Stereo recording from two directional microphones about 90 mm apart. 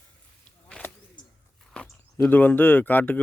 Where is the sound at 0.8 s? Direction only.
15° left (ahead or behind).